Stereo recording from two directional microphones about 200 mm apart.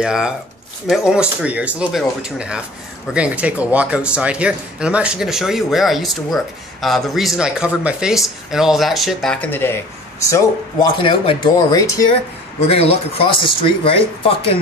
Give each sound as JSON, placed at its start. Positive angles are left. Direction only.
{"t": 0.0, "sound": "speech", "side_deg": -5}
{"t": 12.6, "sound": "speech", "side_deg": 30}